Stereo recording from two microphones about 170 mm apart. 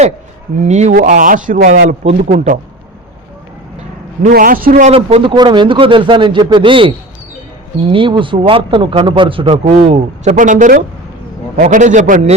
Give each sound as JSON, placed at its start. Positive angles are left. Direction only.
{"t": 0.6, "sound": "a man's voice", "side_deg": -45}
{"t": 4.2, "sound": "a man's voice", "side_deg": -55}
{"t": 4.9, "sound": "a man's voice", "side_deg": -35}